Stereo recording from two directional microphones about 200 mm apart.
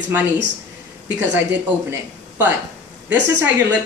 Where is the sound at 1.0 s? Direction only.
10° right (ahead or behind).